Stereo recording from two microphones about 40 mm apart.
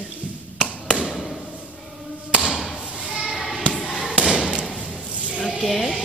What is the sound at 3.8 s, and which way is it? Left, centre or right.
Fireworks, centre.